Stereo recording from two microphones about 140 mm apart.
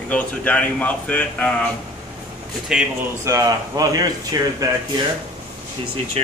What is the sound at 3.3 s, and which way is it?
Speech, 25° right (ahead or behind).